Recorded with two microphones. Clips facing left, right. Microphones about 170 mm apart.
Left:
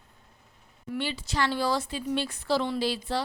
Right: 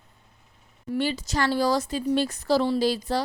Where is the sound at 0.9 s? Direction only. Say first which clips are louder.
Right 5 dB; 40° right (ahead or behind).